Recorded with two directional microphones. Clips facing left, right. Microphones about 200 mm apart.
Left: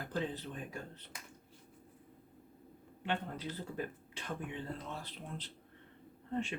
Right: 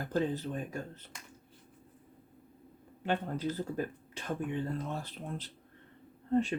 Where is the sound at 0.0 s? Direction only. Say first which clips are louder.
Right 6 dB; 45° right (ahead or behind).